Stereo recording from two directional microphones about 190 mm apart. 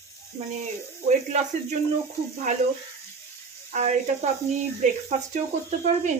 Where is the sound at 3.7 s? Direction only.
40° right (ahead or behind).